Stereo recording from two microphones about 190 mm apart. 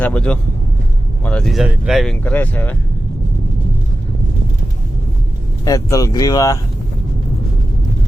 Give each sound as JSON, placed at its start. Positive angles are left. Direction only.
{"t": 0.0, "sound": "speech", "side_deg": 5}
{"t": 5.6, "sound": "speech", "side_deg": 20}